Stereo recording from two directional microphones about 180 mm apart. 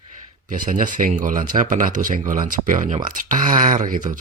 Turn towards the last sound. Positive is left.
turn(degrees=-45)  # may be behind; listen again after turning